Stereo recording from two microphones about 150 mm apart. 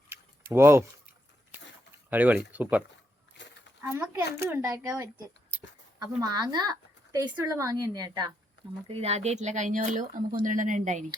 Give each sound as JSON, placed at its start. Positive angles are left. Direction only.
{"t": 0.5, "sound": "speech", "side_deg": -15}
{"t": 6.2, "sound": "speech", "side_deg": -25}
{"t": 8.9, "sound": "speech", "side_deg": -45}